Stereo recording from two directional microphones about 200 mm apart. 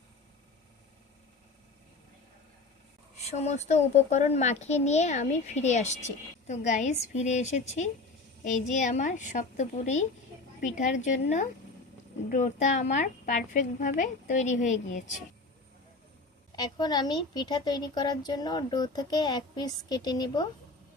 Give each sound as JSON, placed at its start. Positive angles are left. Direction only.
{"t": 3.2, "sound": "a child's voice", "side_deg": 35}
{"t": 16.5, "sound": "speech", "side_deg": 20}